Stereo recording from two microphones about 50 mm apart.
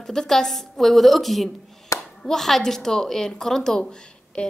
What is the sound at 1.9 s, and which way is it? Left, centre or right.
Clapping, left.